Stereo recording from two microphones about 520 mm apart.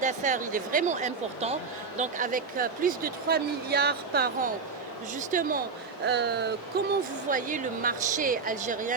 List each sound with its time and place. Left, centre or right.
0.0 s speech: centre